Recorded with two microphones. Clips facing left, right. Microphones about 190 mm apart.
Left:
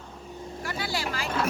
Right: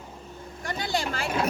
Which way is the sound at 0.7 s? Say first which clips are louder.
Right 4 dB; 5° left (ahead or behind).